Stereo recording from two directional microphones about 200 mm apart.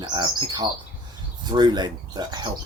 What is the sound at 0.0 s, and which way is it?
Speech, 20° right (ahead or behind).